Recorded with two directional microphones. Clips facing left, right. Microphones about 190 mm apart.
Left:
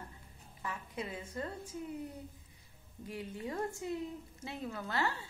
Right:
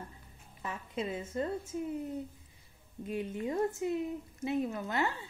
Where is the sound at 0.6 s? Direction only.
25° right (ahead or behind).